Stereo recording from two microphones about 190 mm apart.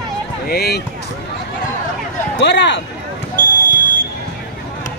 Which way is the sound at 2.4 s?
65° left (ahead or behind).